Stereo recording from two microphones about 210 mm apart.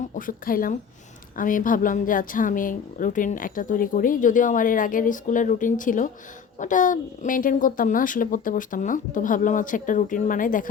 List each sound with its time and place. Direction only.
0.1 s a woman's voice: 40° left (ahead or behind)